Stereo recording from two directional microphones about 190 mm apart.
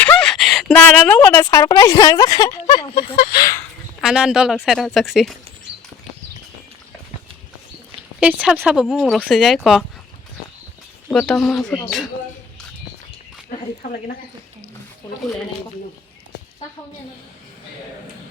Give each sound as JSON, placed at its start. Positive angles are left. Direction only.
{"t": 0.0, "sound": "speech", "side_deg": 5}
{"t": 3.2, "sound": "speech", "side_deg": 55}
{"t": 4.0, "sound": "speech", "side_deg": -5}
{"t": 8.2, "sound": "speech", "side_deg": -5}
{"t": 11.1, "sound": "speech", "side_deg": 5}
{"t": 13.5, "sound": "speech", "side_deg": 45}